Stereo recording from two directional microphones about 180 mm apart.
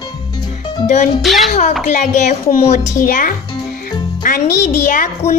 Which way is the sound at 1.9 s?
40° left (ahead or behind).